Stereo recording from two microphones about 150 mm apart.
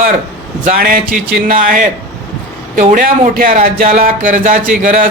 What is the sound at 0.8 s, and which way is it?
Speech, 80° right.